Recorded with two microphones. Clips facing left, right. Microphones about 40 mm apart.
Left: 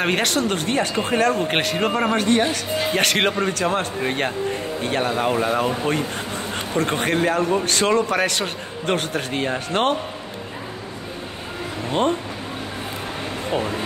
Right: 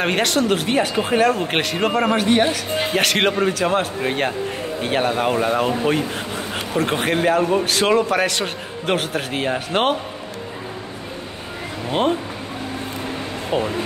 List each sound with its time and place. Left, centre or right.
0.0 s a man's voice: centre
11.9 s speech: centre